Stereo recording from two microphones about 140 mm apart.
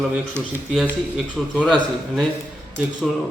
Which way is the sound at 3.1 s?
Centre (ahead or behind).